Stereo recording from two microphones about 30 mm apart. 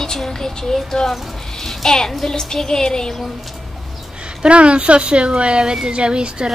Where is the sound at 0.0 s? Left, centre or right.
Centre.